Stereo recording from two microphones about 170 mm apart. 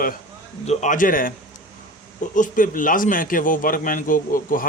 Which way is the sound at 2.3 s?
50° left (ahead or behind).